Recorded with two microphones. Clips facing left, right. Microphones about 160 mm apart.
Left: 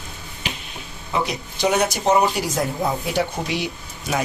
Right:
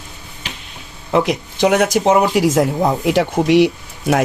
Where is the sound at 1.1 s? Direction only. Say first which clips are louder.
Right 8 dB; 90° right.